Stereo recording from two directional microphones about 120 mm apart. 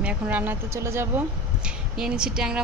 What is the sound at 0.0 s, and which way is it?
A woman's voice, 10° right (ahead or behind).